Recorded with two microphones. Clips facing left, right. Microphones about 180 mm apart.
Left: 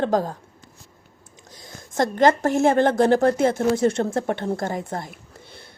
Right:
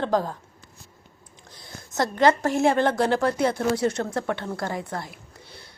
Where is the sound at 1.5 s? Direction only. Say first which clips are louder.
Left 1 dB; 45° left (ahead or behind).